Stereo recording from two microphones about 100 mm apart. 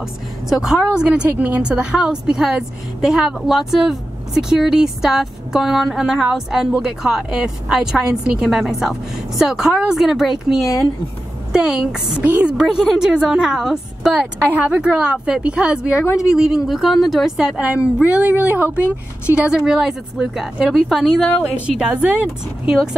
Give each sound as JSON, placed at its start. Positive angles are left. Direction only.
{"t": 0.5, "sound": "a woman's voice", "side_deg": -5}
{"t": 12.3, "sound": "a woman's voice", "side_deg": -20}
{"t": 12.5, "sound": "a woman's voice", "side_deg": -5}
{"t": 16.0, "sound": "a woman's voice", "side_deg": 30}
{"t": 16.3, "sound": "a woman's voice", "side_deg": -5}
{"t": 18.8, "sound": "a woman's voice", "side_deg": 25}
{"t": 19.3, "sound": "a woman's voice", "side_deg": -10}
{"t": 21.5, "sound": "a woman's voice", "side_deg": -10}